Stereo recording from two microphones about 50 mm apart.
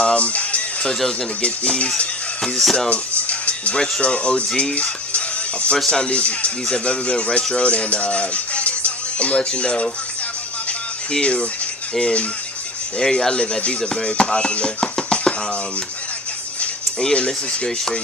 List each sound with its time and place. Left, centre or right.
0.0 s music: left
1.4 s speech: left
2.6 s speech: centre
2.9 s speech: left
5.1 s music: left
5.9 s speech: left
11.1 s speech: left
13.0 s speech: centre
17.0 s speech: left